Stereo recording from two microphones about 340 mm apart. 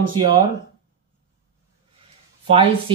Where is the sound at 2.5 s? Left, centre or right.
Centre.